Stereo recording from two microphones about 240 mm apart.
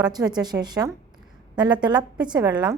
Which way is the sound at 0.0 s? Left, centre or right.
Centre.